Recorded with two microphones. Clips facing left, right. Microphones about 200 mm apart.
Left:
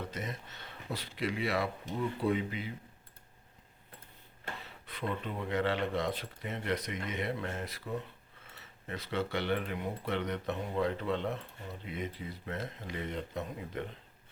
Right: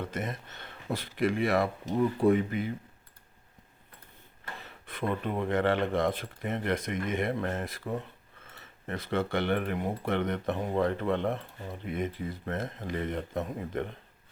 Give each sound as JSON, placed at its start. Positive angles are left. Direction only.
{"t": 0.0, "sound": "speech", "side_deg": -55}
{"t": 4.9, "sound": "speech", "side_deg": -50}